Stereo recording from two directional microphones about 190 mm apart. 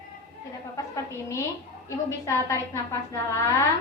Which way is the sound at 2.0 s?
15° left (ahead or behind).